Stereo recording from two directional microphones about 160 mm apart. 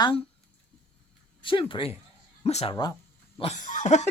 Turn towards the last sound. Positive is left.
turn(degrees=45)  # may be behind; listen again after turning